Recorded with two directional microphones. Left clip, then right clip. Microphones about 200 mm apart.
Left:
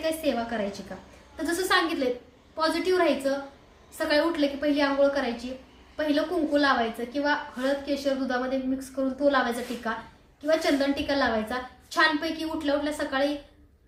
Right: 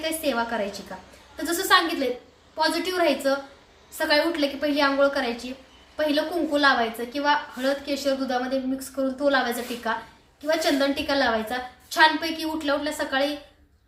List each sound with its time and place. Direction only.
0.0 s a woman's voice: 5° right (ahead or behind)